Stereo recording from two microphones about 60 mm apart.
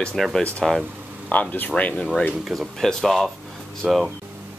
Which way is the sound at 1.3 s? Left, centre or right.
Left.